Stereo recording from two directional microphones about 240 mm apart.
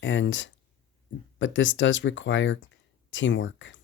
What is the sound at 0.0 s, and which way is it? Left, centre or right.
Speech, left.